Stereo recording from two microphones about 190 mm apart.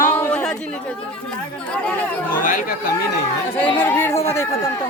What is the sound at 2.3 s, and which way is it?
Speech, 45° left (ahead or behind).